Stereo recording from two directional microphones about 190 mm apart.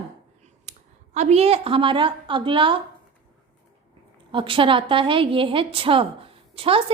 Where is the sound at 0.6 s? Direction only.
40° right (ahead or behind).